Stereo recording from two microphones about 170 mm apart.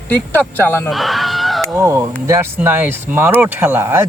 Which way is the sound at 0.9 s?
Centre (ahead or behind).